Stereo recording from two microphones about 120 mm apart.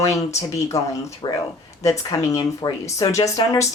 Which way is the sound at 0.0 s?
25° left (ahead or behind).